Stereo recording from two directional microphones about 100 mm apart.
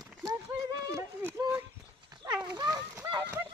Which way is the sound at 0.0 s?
Centre (ahead or behind).